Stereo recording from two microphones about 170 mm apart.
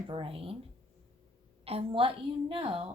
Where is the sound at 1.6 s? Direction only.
35° right (ahead or behind).